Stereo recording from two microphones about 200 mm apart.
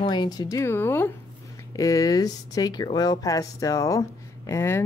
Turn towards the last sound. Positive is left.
turn(degrees=10)  # may be behind; listen again after turning